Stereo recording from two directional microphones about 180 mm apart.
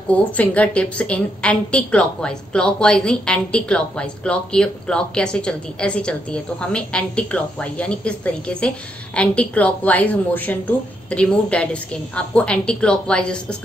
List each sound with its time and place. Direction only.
0.1 s a woman's voice: 10° left (ahead or behind)